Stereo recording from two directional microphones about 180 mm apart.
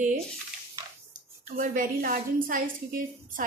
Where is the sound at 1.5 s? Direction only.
50° right (ahead or behind).